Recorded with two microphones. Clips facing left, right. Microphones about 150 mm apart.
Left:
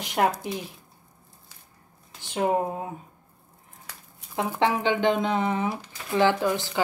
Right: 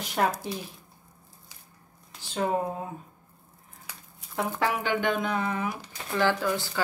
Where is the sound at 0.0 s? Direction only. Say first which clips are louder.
Left 3 dB; 15° left (ahead or behind).